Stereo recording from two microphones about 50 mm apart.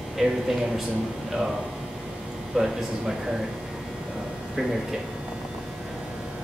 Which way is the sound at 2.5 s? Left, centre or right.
Centre.